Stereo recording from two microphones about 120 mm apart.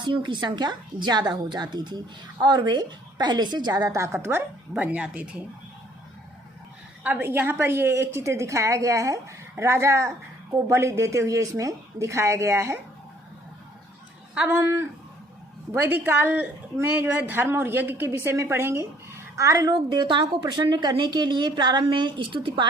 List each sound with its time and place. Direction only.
0.0 s a woman's voice: 40° right (ahead or behind); by 5.4 s 10° right (ahead or behind)
7.0 s a woman's voice: 15° right (ahead or behind)
14.3 s a woman's voice: 20° right (ahead or behind); by 22.6 s 45° right (ahead or behind)